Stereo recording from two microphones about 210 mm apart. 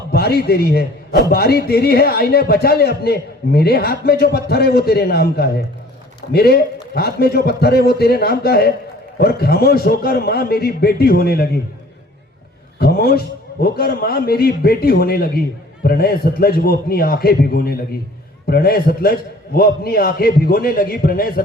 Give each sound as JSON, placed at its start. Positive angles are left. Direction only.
{"t": 0.1, "sound": "a man's voice", "side_deg": 50}
{"t": 12.8, "sound": "a man's voice", "side_deg": 45}